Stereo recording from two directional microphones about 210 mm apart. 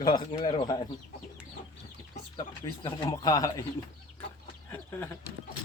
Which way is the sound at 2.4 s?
20° left (ahead or behind).